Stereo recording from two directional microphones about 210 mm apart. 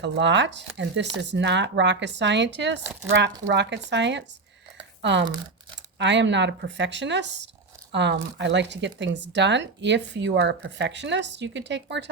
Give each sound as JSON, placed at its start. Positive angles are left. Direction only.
{"t": 0.0, "sound": "speech", "side_deg": -55}
{"t": 6.0, "sound": "speech", "side_deg": -60}